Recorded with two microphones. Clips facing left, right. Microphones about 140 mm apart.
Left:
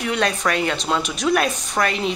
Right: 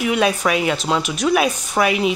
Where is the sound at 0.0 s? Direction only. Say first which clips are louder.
Right 4 dB; 5° right (ahead or behind).